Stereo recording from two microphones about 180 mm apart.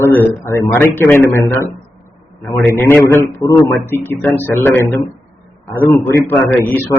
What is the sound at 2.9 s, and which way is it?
A man's voice, 15° left (ahead or behind).